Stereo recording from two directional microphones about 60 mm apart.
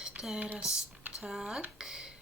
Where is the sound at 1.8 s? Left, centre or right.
Centre.